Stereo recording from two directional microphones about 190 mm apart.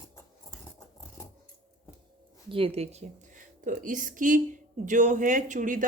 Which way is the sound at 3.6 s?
45° right (ahead or behind).